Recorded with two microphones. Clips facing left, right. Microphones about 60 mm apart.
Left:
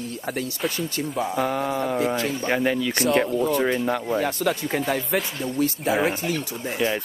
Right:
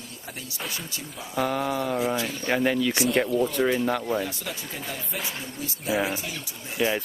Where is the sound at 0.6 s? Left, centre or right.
Left.